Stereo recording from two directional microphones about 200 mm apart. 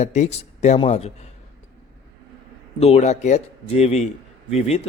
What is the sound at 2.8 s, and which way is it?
Speech, 35° left (ahead or behind).